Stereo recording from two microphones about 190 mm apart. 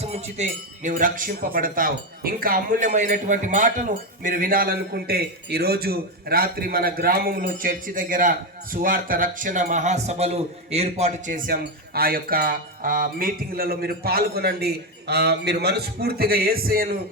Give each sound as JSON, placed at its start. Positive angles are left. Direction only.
{"t": 0.0, "sound": "speech", "side_deg": -35}